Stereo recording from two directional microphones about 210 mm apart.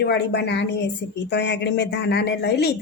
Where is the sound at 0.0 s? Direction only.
55° left (ahead or behind).